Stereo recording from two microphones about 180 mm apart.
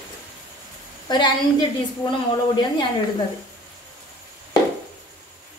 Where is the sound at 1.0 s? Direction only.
25° left (ahead or behind).